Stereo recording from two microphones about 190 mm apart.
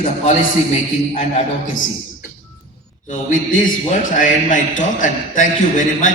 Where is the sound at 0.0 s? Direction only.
40° left (ahead or behind).